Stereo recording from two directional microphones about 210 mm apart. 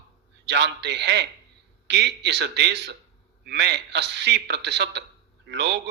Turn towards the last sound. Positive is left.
turn(degrees=-55)  # may be behind; listen again after turning